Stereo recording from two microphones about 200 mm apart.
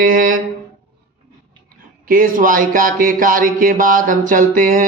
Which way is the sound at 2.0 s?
45° right (ahead or behind).